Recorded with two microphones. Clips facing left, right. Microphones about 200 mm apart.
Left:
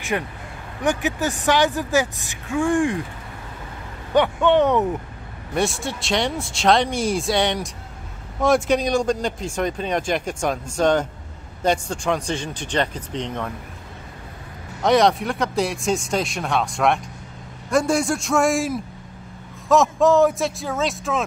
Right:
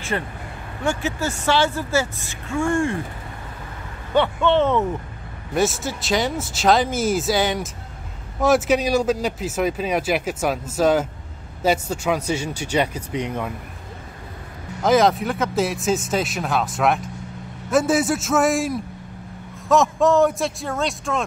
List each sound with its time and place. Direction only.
0.1 s speech: 10° left (ahead or behind)
4.1 s speech: 15° left (ahead or behind)
5.5 s speech: centre (ahead or behind)
14.8 s speech: centre (ahead or behind)